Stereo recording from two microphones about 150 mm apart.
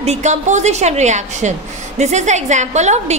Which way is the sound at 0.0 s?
50° right (ahead or behind).